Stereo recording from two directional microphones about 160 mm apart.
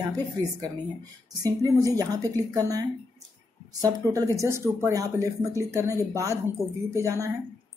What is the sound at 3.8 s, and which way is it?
Speech, 20° right (ahead or behind).